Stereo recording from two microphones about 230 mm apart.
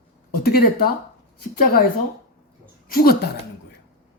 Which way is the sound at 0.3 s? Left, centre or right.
Left.